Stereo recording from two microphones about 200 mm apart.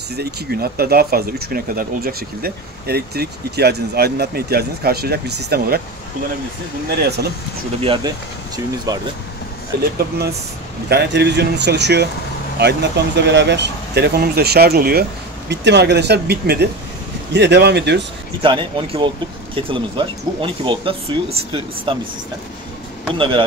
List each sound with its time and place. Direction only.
0.1 s speech: 50° right (ahead or behind)
7.0 s speech: 55° right (ahead or behind)
7.8 s speech: 25° right (ahead or behind)
10.9 s speech: 55° right (ahead or behind)
18.4 s speech: 25° right (ahead or behind)
23.1 s speech: 25° right (ahead or behind)